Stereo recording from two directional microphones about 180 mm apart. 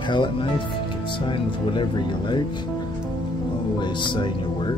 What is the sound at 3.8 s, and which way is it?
Speech, 25° left (ahead or behind).